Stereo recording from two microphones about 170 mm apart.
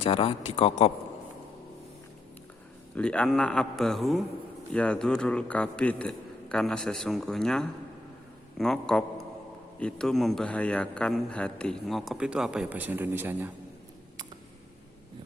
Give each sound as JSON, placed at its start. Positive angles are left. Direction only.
{"t": 0.0, "sound": "speech", "side_deg": 35}
{"t": 2.9, "sound": "a man's voice", "side_deg": 5}